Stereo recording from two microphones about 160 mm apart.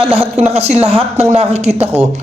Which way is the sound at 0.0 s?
35° right (ahead or behind).